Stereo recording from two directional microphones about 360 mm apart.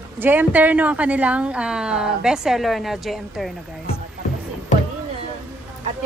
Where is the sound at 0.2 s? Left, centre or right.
Centre.